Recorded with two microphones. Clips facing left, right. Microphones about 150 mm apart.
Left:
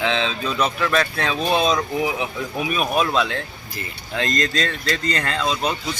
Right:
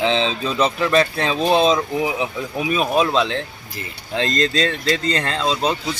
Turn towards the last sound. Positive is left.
turn(degrees=-30)  # may be behind; listen again after turning